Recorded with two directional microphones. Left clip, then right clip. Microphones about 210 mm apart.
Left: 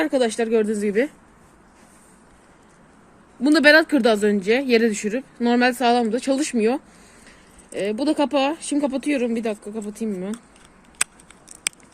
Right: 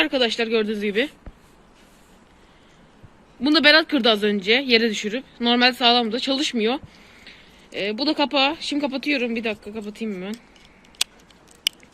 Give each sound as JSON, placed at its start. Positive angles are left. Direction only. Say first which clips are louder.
{"t": 0.0, "sound": "speech", "louder": "even", "side_deg": 35}
{"t": 0.8, "sound": "a woman's voice", "louder": "left 2 dB", "side_deg": 20}
{"t": 3.4, "sound": "speech", "louder": "left 1 dB", "side_deg": 35}